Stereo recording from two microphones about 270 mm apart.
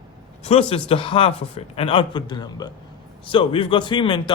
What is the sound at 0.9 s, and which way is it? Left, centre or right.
A man's voice, centre.